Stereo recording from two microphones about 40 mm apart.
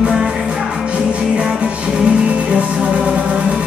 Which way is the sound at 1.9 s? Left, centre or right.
Right.